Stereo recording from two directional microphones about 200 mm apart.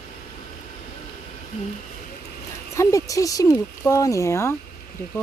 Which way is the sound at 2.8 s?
15° left (ahead or behind).